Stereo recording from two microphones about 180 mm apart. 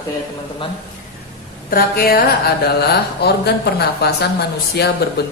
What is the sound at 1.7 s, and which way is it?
Speech, 55° left (ahead or behind).